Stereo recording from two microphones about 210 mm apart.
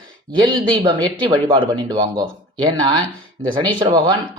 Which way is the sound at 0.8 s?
20° right (ahead or behind).